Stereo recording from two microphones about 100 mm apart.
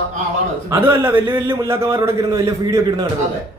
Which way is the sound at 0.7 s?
20° right (ahead or behind).